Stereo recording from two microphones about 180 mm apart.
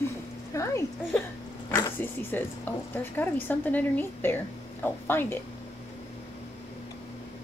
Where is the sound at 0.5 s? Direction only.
15° left (ahead or behind).